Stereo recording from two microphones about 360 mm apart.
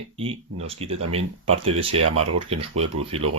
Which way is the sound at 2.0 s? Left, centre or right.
Right.